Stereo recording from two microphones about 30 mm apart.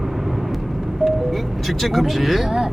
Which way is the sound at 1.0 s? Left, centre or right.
Centre.